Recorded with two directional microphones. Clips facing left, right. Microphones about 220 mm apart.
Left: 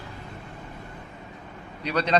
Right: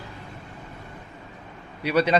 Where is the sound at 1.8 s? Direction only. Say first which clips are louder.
Right 3 dB; 5° right (ahead or behind).